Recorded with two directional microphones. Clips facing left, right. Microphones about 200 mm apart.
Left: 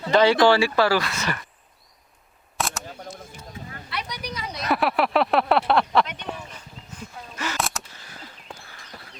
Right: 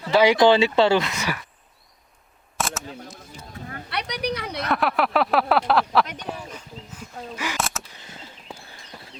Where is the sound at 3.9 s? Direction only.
65° right (ahead or behind).